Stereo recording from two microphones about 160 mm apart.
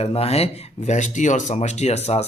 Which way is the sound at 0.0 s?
40° left (ahead or behind).